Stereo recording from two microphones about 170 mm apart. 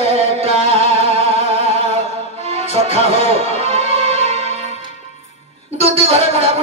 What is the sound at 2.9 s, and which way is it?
Music, 40° left (ahead or behind).